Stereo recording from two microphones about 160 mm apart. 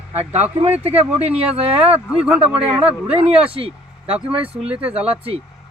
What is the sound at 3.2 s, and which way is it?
Speech, 35° right (ahead or behind).